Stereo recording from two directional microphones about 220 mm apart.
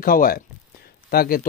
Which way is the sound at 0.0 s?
40° left (ahead or behind).